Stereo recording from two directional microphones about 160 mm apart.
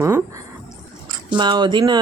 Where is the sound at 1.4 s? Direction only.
30° right (ahead or behind).